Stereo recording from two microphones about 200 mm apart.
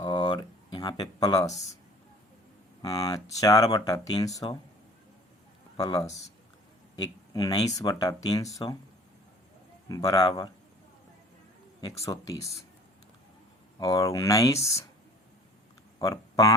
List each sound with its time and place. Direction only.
0.0 s a sound: 20° left (ahead or behind)
2.8 s speech: 20° left (ahead or behind)
5.7 s speech: 20° left (ahead or behind)
9.9 s speech: 20° left (ahead or behind)
11.8 s speech: 15° left (ahead or behind)
13.7 s speech: 20° left (ahead or behind)
16.0 s speech: 15° left (ahead or behind)